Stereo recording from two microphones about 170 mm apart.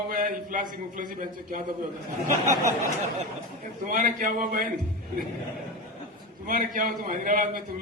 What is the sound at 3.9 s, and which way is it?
Speech, 50° right (ahead or behind).